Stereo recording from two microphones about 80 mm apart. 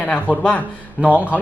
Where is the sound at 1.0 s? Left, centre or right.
Centre.